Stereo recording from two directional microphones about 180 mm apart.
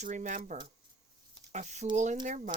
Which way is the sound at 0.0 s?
45° right (ahead or behind).